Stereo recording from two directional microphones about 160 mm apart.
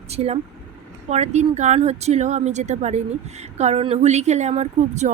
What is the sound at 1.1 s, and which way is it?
A woman's voice, 45° right (ahead or behind).